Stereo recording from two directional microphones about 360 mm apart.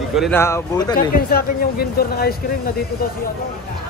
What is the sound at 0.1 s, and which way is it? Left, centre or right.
Speech, centre.